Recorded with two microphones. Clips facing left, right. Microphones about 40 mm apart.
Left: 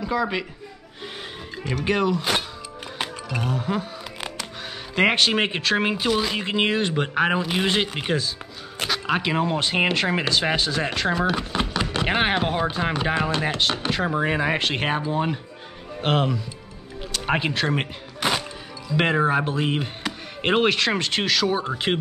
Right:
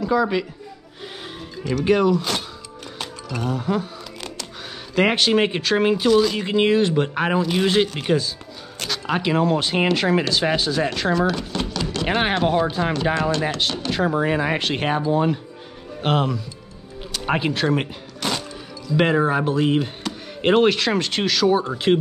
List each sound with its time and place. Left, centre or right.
0.0 s speech: centre
1.6 s speech: left
1.9 s speech: centre
3.0 s speech: centre
4.9 s speech: centre
11.1 s a sound: left
12.1 s speech: centre